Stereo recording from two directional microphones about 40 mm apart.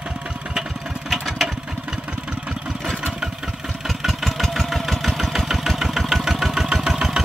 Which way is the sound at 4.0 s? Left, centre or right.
Centre.